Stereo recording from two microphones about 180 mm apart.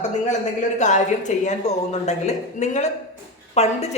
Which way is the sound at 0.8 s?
40° left (ahead or behind).